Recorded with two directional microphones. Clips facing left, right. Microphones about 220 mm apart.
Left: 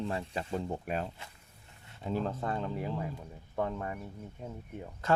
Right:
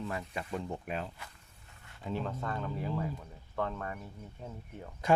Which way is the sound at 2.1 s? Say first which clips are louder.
Left 3 dB; 30° left (ahead or behind).